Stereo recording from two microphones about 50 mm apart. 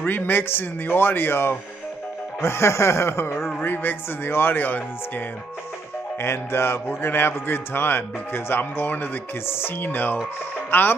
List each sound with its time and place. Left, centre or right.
0.0 s a man's voice: left
2.4 s speech: left
3.6 s a man's voice: left
6.2 s a man's voice: left